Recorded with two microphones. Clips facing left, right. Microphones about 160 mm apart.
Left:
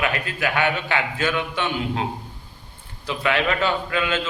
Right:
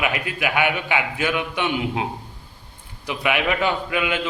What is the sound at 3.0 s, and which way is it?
A man's voice, 15° right (ahead or behind).